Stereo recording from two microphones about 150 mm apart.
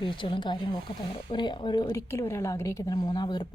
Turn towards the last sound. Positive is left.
turn(degrees=30)  # may be behind; listen again after turning